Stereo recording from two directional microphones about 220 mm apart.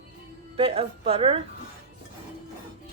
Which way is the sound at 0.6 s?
25° right (ahead or behind).